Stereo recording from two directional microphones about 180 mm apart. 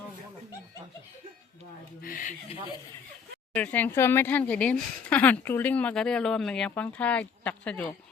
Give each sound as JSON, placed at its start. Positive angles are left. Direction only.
{"t": 2.0, "sound": "speech", "side_deg": 50}
{"t": 3.5, "sound": "speech", "side_deg": 10}